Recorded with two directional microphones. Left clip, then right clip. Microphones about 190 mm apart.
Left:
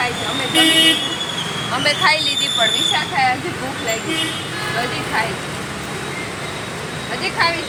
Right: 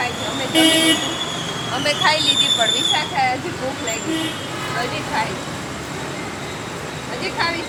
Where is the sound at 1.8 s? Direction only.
25° left (ahead or behind).